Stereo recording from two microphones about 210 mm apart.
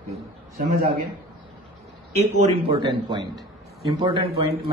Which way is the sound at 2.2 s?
30° right (ahead or behind).